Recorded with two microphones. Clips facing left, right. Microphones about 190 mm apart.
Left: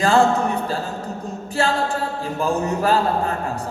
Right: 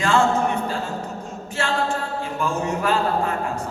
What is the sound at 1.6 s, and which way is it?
A capella, 35° left (ahead or behind).